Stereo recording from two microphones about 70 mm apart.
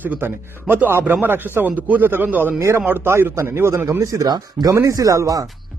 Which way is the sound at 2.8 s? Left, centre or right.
Right.